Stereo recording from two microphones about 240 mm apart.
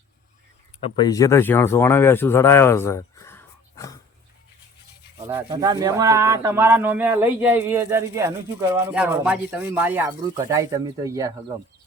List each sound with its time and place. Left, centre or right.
0.9 s speech: centre
5.2 s speech: centre